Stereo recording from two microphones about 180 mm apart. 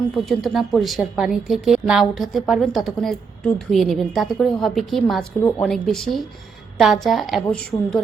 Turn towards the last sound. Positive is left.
turn(degrees=5)  # may be behind; listen again after turning